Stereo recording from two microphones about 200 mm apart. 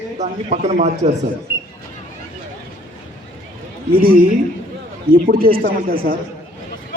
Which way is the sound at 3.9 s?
45° right (ahead or behind).